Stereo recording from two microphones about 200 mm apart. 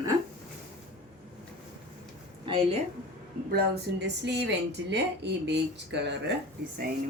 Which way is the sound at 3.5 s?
55° right (ahead or behind).